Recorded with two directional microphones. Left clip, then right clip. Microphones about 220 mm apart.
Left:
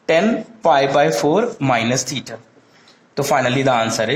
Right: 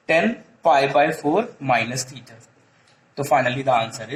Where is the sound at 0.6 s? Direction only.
40° left (ahead or behind).